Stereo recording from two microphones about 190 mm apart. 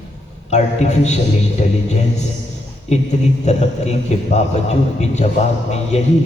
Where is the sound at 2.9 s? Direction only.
35° left (ahead or behind).